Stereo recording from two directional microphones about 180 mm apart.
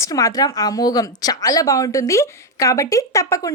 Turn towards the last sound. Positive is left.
turn(degrees=20)  # may be behind; listen again after turning